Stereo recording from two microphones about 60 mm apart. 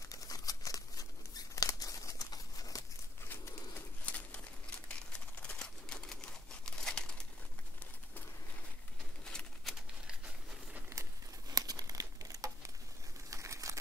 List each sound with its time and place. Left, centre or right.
0.1 s tearing: left
4.0 s crumpling: left
4.8 s typewriter: left
9.2 s bird: centre
11.5 s crumpling: right